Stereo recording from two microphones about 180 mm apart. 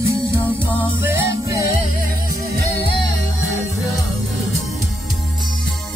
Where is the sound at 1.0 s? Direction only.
15° right (ahead or behind).